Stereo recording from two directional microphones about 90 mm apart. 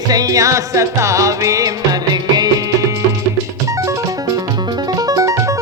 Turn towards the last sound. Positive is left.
turn(degrees=-35)  # may be behind; listen again after turning